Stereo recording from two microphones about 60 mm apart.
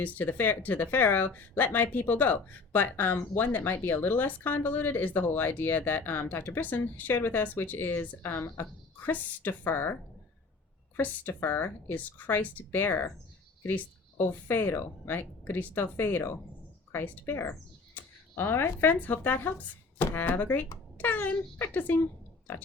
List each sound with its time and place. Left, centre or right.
0.0 s speech: left
6.6 s speech: left
11.3 s speech: left
14.3 s speech: left